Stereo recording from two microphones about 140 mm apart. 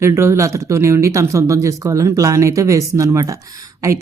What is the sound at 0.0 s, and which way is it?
Speech, 20° right (ahead or behind).